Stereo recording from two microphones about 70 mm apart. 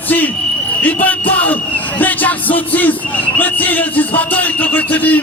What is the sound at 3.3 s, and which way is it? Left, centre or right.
Speech, left.